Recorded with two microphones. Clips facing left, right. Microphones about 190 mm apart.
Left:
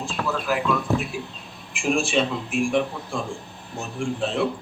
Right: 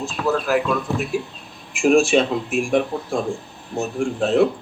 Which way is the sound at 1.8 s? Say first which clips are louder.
Right 7 dB; 45° right (ahead or behind).